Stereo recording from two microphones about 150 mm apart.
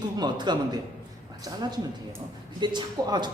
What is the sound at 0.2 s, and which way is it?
A man's voice, 30° right (ahead or behind).